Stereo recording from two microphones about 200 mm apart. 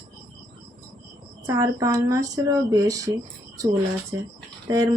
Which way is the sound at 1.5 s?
15° right (ahead or behind).